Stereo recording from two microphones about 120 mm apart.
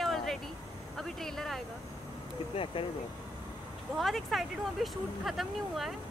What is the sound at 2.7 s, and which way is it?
Speech, 45° left (ahead or behind).